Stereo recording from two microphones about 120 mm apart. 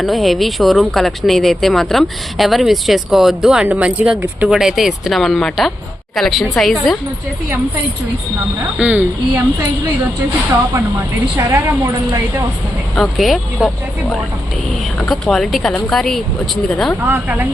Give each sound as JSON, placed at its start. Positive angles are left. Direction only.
{"t": 0.0, "sound": "speech", "side_deg": 0}
{"t": 8.8, "sound": "a woman's voice", "side_deg": -15}
{"t": 11.3, "sound": "a woman's voice", "side_deg": -25}
{"t": 13.0, "sound": "speech", "side_deg": 0}
{"t": 14.9, "sound": "speech", "side_deg": 0}
{"t": 17.1, "sound": "a woman's voice", "side_deg": -15}